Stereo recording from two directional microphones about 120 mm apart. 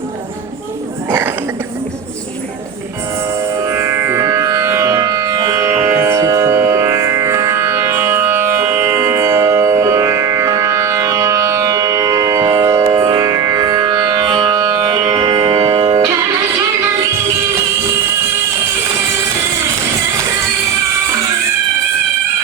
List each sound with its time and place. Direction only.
3.7 s music: 20° right (ahead or behind)